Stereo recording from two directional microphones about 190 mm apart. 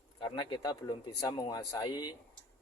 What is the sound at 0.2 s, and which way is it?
Speech, 25° left (ahead or behind).